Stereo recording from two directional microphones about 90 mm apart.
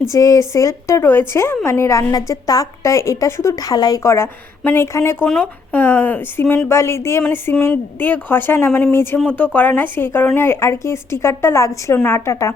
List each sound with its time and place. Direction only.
0.1 s a woman's voice: 35° left (ahead or behind)
7.2 s a sound: 15° left (ahead or behind)
7.7 s a woman's voice: 20° left (ahead or behind)